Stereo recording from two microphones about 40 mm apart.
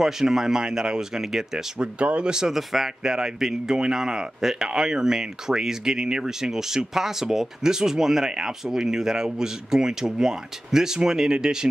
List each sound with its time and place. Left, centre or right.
0.0 s speech: centre
1.8 s speech: right
2.5 s speech: centre
3.0 s speech: centre